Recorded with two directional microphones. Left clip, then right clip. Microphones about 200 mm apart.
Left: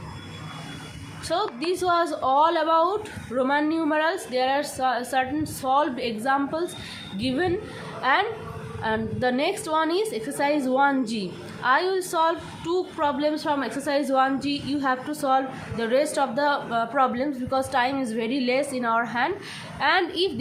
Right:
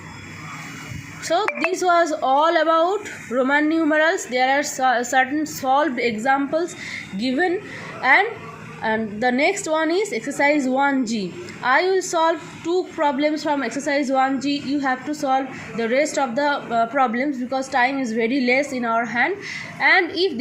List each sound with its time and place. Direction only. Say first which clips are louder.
1.3 s a woman's voice: right 5 dB; 25° right (ahead or behind)